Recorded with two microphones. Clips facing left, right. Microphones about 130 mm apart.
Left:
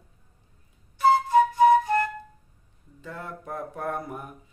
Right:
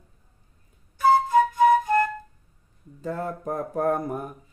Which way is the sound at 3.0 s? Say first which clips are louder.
Right 8 dB; 40° right (ahead or behind).